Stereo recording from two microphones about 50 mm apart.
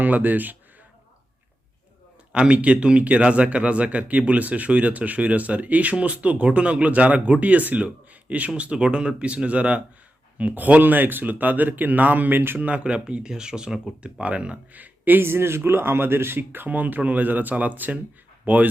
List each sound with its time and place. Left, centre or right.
0.0 s speech: right
2.3 s speech: right; by 13.9 s centre
14.0 s speech: right
14.8 s speech: right